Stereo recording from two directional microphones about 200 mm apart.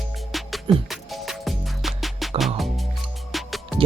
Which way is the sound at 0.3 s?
Centre (ahead or behind).